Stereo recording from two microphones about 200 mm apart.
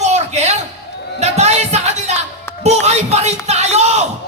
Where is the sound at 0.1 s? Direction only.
35° right (ahead or behind).